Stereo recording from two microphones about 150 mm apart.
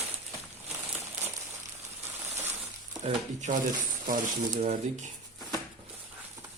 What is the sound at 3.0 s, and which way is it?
Speech, 50° right (ahead or behind).